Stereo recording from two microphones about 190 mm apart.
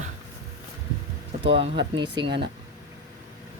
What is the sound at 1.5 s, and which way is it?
Speech, 30° right (ahead or behind).